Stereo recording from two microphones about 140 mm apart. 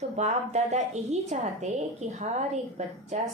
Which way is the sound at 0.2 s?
55° right (ahead or behind).